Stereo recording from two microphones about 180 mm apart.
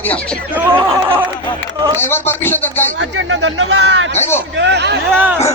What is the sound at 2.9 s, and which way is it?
Speech, 90° right.